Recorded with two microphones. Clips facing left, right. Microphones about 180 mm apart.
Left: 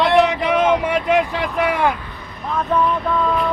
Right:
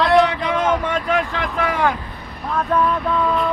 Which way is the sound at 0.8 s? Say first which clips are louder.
Left 3 dB; 15° left (ahead or behind).